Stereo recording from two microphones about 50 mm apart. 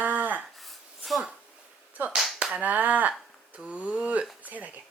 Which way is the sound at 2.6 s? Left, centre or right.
Right.